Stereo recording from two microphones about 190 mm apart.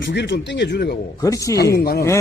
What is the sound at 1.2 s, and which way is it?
Speech, 15° left (ahead or behind).